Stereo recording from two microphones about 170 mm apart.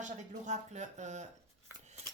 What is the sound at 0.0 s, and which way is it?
A woman's voice, 45° right (ahead or behind).